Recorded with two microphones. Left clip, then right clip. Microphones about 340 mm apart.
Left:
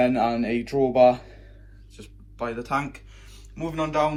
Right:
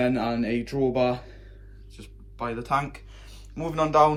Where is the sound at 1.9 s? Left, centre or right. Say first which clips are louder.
Left 2 dB; right.